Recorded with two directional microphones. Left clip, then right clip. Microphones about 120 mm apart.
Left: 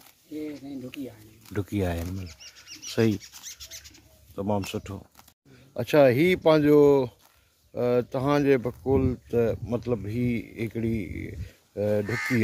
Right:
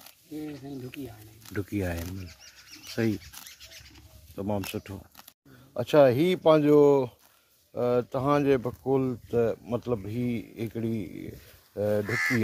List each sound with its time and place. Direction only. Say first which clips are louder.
1.5 s speech: left 3 dB; 40° left (ahead or behind); by 3.3 s 55° left (ahead or behind)
4.6 s speech: left 2 dB; 30° left (ahead or behind)
12.1 s speech: right 2 dB; centre (ahead or behind)